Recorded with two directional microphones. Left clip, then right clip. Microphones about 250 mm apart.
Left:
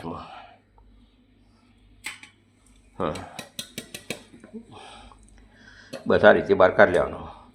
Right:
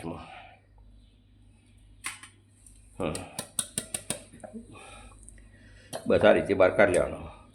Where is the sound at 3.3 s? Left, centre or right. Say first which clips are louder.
Left 1 dB; right.